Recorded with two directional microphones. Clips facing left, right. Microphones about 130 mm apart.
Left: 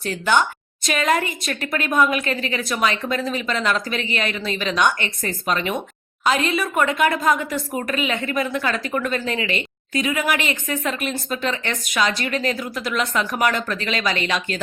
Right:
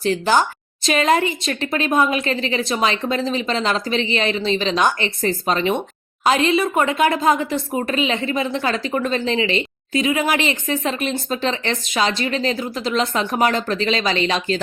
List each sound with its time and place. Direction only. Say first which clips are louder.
0.0 s a woman's voice: right 3 dB; 30° right (ahead or behind)